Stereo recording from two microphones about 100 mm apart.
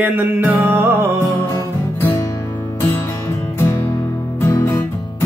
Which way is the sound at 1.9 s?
20° left (ahead or behind).